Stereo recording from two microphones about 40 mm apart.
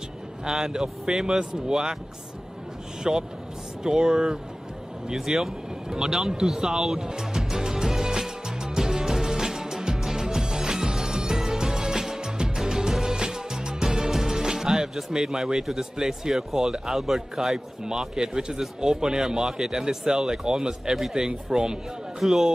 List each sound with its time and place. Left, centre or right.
0.5 s speech: centre
3.0 s speech: centre
7.1 s music: centre
15.0 s speech: centre
17.8 s speech: centre
22.2 s a man's voice: centre